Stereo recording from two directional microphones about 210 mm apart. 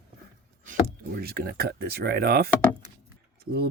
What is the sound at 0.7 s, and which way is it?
Speech, 45° right (ahead or behind).